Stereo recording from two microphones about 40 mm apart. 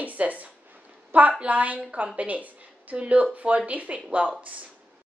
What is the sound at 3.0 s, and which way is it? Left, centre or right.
Speech, right.